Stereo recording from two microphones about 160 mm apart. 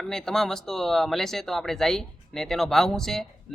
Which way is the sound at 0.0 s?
5° left (ahead or behind).